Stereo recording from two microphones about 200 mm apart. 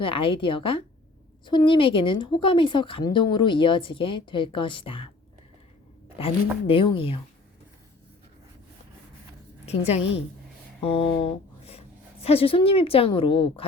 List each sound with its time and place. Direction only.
0.0 s a woman's voice: 25° left (ahead or behind)
6.1 s a woman's voice: 25° left (ahead or behind)
9.6 s a woman's voice: 30° left (ahead or behind)